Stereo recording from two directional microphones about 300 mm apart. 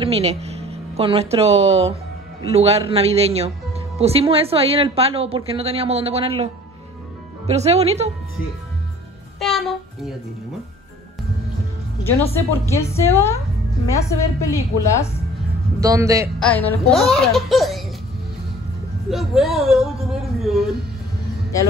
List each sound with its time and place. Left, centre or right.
0.0 s a woman's voice: centre
9.4 s speech: centre
12.0 s a woman's voice: centre
15.8 s a man's voice: centre
16.3 s speech: centre
19.0 s speech: centre